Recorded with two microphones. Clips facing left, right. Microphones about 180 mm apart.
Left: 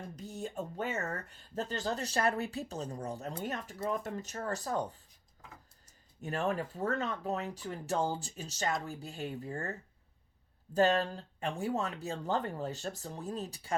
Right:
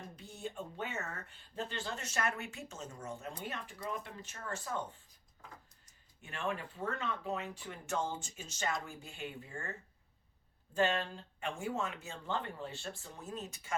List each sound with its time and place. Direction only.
0.2 s speech: 40° left (ahead or behind)
6.2 s speech: 40° left (ahead or behind)
10.8 s speech: 40° left (ahead or behind)